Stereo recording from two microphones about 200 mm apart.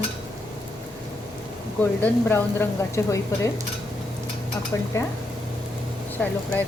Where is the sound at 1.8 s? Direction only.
10° left (ahead or behind).